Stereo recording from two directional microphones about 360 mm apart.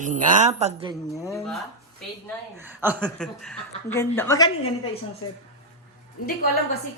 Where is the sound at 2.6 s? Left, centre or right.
Centre.